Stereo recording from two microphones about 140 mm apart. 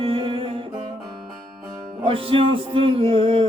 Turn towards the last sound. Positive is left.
turn(degrees=-40)  # may be behind; listen again after turning